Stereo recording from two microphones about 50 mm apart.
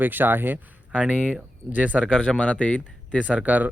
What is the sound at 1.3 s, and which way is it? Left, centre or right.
Speech, right.